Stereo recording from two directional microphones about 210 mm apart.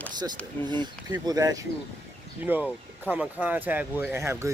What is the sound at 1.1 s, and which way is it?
Speech, 15° right (ahead or behind).